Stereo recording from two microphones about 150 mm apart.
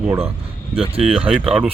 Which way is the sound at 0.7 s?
40° right (ahead or behind).